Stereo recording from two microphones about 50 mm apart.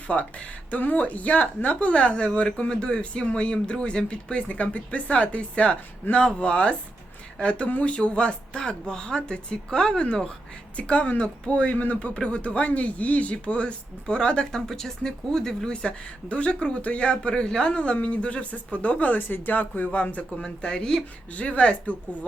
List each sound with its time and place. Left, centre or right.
0.1 s a woman's voice: left
20.4 s speech: centre
21.3 s a woman's voice: left